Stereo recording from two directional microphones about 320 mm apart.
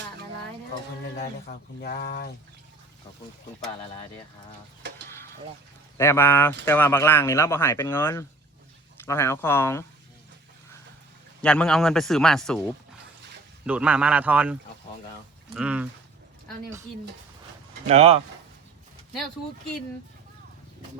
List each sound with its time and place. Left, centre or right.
1.1 s speech: left
5.0 s a sound: centre
6.0 s speech: centre
11.4 s speech: centre
13.7 s speech: centre
17.8 s speech: centre